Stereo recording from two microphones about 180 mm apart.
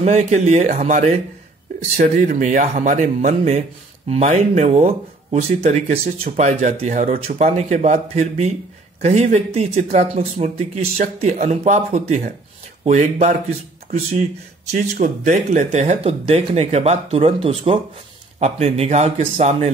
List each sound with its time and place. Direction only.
0.0 s speech: 40° right (ahead or behind)
14.7 s speech: 45° right (ahead or behind)